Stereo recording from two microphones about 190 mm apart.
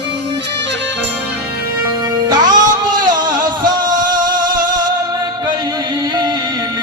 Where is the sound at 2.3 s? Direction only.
20° right (ahead or behind).